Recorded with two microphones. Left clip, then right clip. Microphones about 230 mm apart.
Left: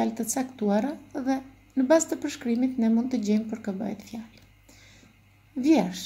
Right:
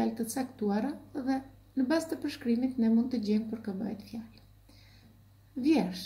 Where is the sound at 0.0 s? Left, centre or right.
Left.